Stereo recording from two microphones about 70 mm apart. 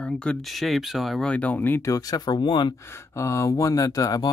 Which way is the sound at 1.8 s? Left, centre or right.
Left.